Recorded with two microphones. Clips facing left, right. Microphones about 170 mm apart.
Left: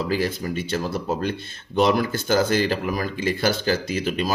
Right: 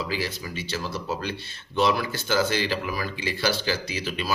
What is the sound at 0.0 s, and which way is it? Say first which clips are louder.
Speech: left 6 dB; 50° left (ahead or behind).